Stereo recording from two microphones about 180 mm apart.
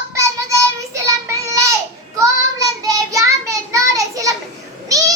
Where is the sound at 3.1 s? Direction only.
15° right (ahead or behind).